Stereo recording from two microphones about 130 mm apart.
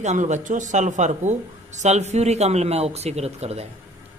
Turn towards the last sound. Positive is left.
turn(degrees=-55)  # may be behind; listen again after turning